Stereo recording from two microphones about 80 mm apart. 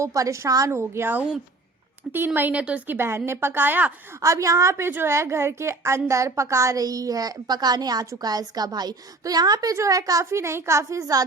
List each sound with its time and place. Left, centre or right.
0.0 s a woman's voice: right
0.7 s a woman's voice: right
4.2 s a woman's voice: right